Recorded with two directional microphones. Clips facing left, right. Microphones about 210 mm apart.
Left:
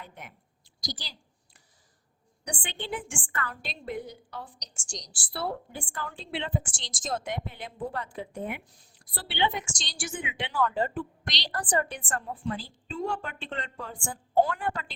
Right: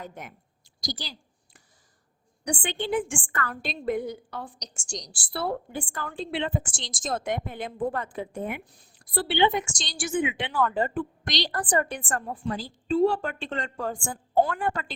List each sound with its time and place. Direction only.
0.0 s a woman's voice: 45° right (ahead or behind)
2.4 s a woman's voice: 45° right (ahead or behind)